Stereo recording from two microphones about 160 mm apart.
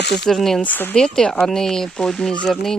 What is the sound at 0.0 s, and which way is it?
Speech, 90° left.